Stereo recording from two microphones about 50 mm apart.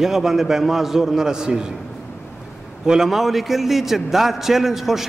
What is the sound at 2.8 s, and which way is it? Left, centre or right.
A man's voice, centre.